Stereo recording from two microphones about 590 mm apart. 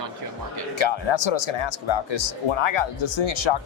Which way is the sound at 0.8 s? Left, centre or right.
Left.